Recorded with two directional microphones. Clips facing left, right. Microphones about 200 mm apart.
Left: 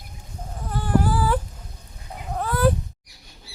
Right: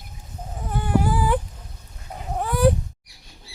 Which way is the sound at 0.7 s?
15° right (ahead or behind).